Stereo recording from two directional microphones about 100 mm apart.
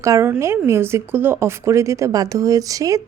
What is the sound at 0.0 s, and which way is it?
Speech, 30° right (ahead or behind).